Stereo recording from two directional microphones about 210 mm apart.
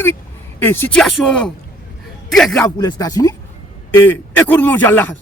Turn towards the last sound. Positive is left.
turn(degrees=10)  # may be behind; listen again after turning